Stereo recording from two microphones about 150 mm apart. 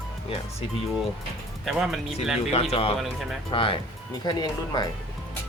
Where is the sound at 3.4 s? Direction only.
35° left (ahead or behind).